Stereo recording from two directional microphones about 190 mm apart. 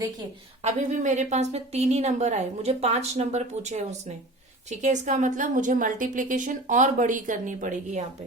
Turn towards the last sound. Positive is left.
turn(degrees=-40)  # may be behind; listen again after turning